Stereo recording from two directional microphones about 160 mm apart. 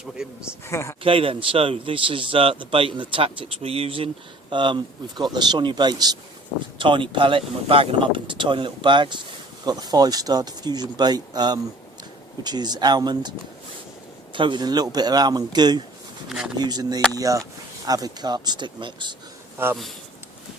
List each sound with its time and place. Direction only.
0.2 s speech: 5° right (ahead or behind)
0.7 s speech: 15° left (ahead or behind)
1.0 s a man's voice: 35° right (ahead or behind)
14.3 s speech: 30° right (ahead or behind)
19.6 s speech: 15° right (ahead or behind)